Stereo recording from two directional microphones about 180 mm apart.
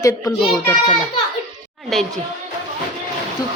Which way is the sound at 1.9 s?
Centre (ahead or behind).